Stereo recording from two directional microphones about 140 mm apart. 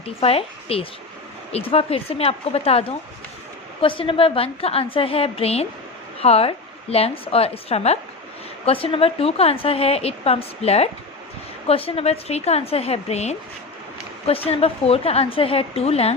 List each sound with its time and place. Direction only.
0.0 s a woman's voice: 45° left (ahead or behind)